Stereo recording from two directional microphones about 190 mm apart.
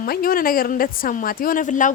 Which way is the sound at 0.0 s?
50° left (ahead or behind).